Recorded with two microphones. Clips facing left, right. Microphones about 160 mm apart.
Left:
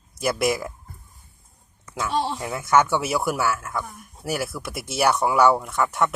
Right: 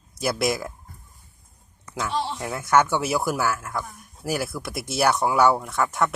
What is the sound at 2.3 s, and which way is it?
Speech, centre (ahead or behind).